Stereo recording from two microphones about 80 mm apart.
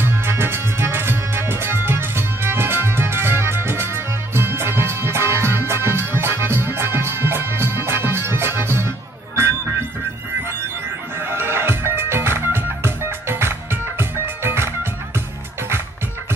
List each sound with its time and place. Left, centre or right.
0.0 s music: right
11.1 s music: right